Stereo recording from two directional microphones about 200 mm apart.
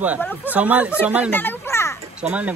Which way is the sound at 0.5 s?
5° right (ahead or behind).